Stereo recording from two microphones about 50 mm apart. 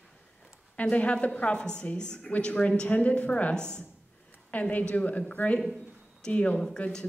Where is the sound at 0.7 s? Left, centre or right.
Left.